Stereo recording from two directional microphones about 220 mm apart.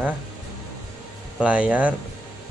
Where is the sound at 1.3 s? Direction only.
5° right (ahead or behind).